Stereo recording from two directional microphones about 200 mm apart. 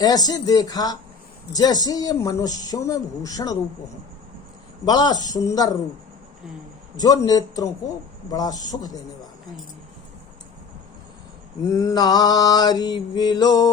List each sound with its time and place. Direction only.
0.0 s speech: 20° left (ahead or behind)
4.9 s speech: 20° left (ahead or behind)
6.9 s speech: 20° left (ahead or behind)
11.7 s speech: 15° left (ahead or behind)